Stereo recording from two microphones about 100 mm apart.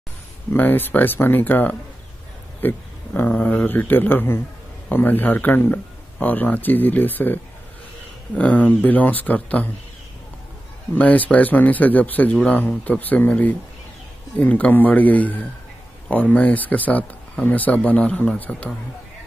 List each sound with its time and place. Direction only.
0.5 s speech: 20° left (ahead or behind)
8.4 s speech: 15° left (ahead or behind)
11.0 s speech: 15° left (ahead or behind)